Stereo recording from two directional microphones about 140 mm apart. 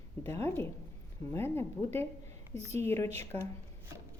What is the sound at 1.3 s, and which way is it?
A woman's voice, 15° left (ahead or behind).